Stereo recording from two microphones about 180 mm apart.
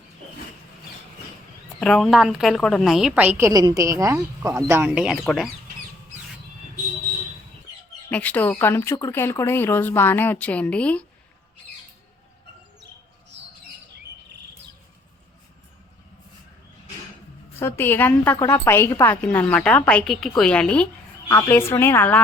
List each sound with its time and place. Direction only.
1.8 s a woman's voice: 5° left (ahead or behind); by 5.0 s 15° right (ahead or behind)
5.0 s speech: centre (ahead or behind)
8.1 s speech: 10° left (ahead or behind)
13.3 s bird: 75° right (ahead or behind)
17.6 s speech: 15° left (ahead or behind)